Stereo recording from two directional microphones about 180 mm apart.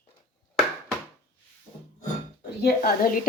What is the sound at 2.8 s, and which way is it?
Speech, 50° left (ahead or behind).